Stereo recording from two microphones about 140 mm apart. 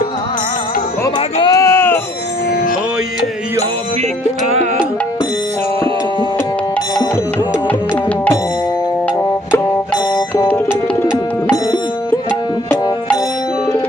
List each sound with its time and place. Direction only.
1.4 s sheep: 25° left (ahead or behind)
10.2 s music: 25° left (ahead or behind)